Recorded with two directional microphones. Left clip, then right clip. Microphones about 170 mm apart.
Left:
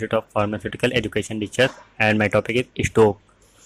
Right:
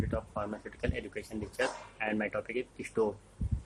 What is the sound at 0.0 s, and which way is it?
Speech, 30° left (ahead or behind).